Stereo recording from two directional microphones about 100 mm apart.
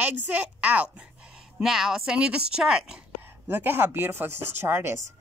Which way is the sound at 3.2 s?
20° right (ahead or behind).